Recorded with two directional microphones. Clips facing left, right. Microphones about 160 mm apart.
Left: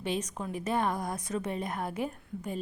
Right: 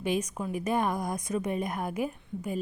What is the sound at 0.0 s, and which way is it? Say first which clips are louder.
Speech: right 3 dB; 10° right (ahead or behind).